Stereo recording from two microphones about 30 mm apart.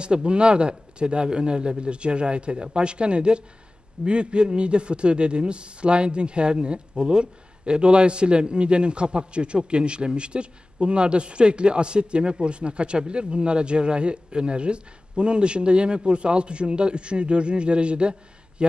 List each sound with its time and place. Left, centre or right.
0.0 s a man's voice: right